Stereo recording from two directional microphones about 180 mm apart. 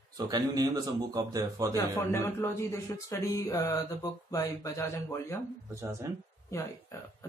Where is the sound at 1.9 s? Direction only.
15° left (ahead or behind).